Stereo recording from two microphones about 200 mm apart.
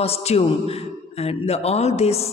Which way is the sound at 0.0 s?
30° left (ahead or behind).